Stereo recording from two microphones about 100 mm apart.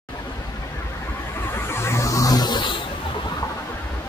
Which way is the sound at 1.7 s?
25° left (ahead or behind).